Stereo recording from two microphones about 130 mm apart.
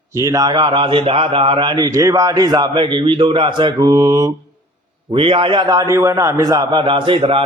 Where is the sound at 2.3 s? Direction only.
35° right (ahead or behind).